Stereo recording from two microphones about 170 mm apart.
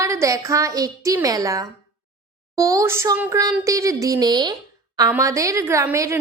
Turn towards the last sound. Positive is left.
turn(degrees=-15)  # may be behind; listen again after turning